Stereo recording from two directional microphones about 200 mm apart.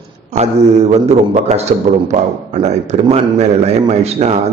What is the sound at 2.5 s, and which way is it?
A man's voice, 35° right (ahead or behind).